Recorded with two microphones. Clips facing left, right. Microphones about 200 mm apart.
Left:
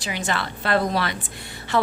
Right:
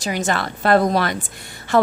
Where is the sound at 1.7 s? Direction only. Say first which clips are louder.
Right 6 dB; 45° right (ahead or behind).